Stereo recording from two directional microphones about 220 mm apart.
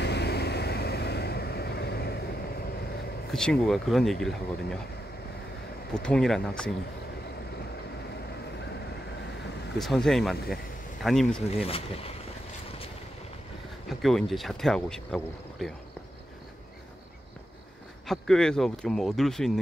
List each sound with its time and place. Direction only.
0.0 s vehicle: 50° left (ahead or behind)
3.3 s speech: 5° left (ahead or behind)
6.0 s speech: 5° left (ahead or behind)
9.8 s speech: centre (ahead or behind)
11.5 s speech: 25° left (ahead or behind)
13.8 s speech: centre (ahead or behind)
18.0 s speech: centre (ahead or behind)